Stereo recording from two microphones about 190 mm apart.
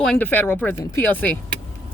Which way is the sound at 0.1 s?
10° left (ahead or behind).